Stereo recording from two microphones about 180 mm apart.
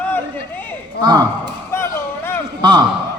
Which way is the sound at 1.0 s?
20° right (ahead or behind).